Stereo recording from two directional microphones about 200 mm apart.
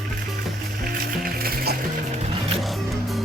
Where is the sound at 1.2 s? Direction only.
50° right (ahead or behind).